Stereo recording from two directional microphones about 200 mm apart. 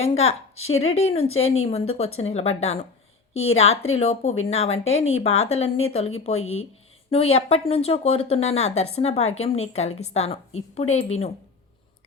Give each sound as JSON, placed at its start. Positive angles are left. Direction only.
{"t": 0.0, "sound": "speech", "side_deg": 30}